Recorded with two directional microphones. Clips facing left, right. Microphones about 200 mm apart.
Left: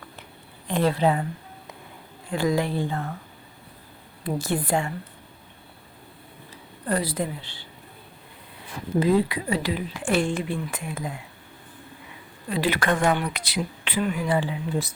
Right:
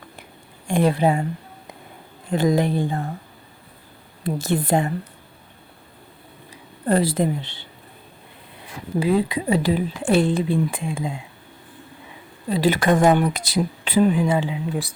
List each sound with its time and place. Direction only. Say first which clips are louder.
0.7 s speech: right 3 dB; 15° right (ahead or behind)
2.6 s speech: right 4 dB; 15° right (ahead or behind)
2.9 s speech: right 3 dB; 30° right (ahead or behind)
4.2 s speech: right 3 dB; 25° right (ahead or behind)
6.8 s speech: right 7 dB; 25° right (ahead or behind)
9.0 s speech: right 1 dB; 15° right (ahead or behind)
9.5 s speech: right 6 dB; 35° right (ahead or behind)
12.5 s speech: right 5 dB; 40° right (ahead or behind)
14.1 s speech: right 4 dB; 25° right (ahead or behind)